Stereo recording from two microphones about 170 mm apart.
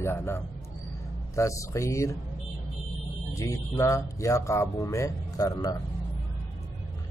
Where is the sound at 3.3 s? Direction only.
15° left (ahead or behind).